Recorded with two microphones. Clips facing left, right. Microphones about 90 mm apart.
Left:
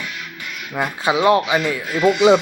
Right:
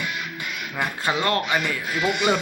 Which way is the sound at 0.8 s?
15° left (ahead or behind).